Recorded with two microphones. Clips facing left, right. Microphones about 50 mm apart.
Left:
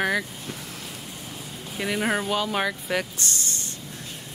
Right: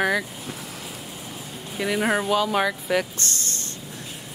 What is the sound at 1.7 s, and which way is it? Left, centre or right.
Speech, centre.